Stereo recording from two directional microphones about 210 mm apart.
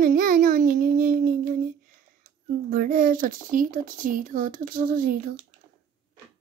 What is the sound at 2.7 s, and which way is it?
A woman's voice, 45° right (ahead or behind).